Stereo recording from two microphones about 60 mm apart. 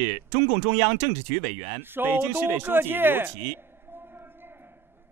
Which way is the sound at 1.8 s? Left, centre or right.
Right.